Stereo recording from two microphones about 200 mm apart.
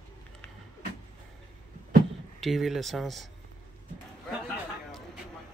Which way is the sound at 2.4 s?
Centre (ahead or behind).